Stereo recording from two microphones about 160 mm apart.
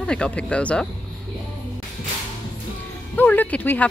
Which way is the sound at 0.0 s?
5° left (ahead or behind).